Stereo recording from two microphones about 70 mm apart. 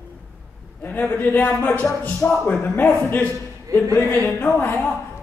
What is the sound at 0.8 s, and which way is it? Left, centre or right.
A man's voice, left.